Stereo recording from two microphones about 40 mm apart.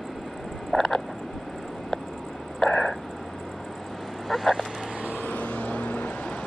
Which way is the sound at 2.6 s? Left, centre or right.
Left.